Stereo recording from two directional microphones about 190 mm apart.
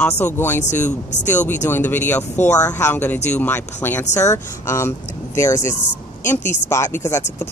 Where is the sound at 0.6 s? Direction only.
40° left (ahead or behind).